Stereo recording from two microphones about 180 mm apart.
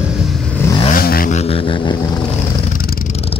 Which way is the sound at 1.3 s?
30° left (ahead or behind).